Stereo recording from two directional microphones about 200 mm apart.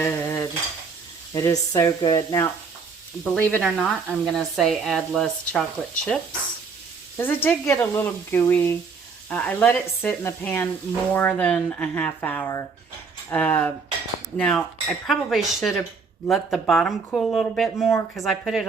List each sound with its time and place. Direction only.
0.0 s cutlery: 10° left (ahead or behind)
1.3 s speech: 15° left (ahead or behind)
3.2 s speech: 5° left (ahead or behind)
7.2 s speech: 10° left (ahead or behind)
17.9 s speech: 15° left (ahead or behind)
18.3 s speech: centre (ahead or behind)